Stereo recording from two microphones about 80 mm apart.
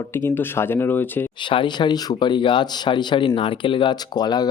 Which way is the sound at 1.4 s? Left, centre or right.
Left.